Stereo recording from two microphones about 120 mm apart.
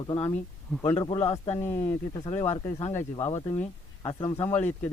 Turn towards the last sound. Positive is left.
turn(degrees=30)  # may be behind; listen again after turning